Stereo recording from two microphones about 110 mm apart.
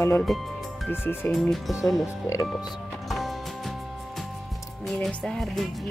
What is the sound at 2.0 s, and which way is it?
Speech, 30° left (ahead or behind).